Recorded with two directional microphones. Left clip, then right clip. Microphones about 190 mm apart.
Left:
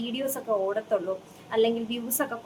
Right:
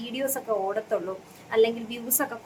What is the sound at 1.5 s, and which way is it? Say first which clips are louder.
Speech: right 2 dB; 5° right (ahead or behind).